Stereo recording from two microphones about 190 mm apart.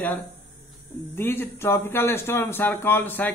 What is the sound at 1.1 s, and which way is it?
A man's voice, 10° left (ahead or behind).